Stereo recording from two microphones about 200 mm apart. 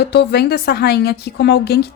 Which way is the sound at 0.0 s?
55° left (ahead or behind).